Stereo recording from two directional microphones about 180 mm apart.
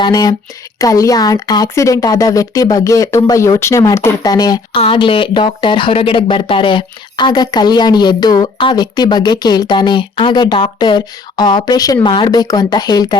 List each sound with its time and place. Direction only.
0.0 s speech: 20° left (ahead or behind)